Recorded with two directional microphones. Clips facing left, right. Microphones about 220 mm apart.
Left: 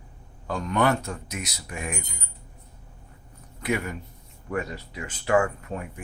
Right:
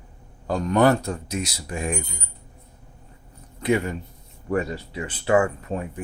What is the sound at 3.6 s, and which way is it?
Speech, 30° right (ahead or behind).